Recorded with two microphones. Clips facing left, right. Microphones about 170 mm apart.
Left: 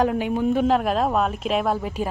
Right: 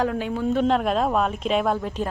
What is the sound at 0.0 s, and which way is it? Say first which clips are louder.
Speech: left 3 dB; 20° left (ahead or behind).